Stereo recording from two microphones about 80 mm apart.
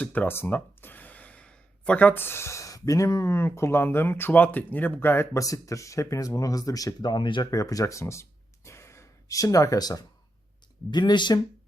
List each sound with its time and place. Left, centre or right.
0.0 s gasp: left
3.3 s speech: left
7.5 s speech: left
10.9 s speech: left